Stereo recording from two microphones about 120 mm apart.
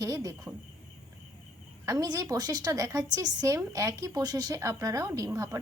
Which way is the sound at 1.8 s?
30° right (ahead or behind).